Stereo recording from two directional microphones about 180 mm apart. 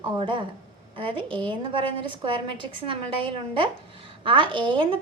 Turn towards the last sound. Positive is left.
turn(degrees=-30)  # may be behind; listen again after turning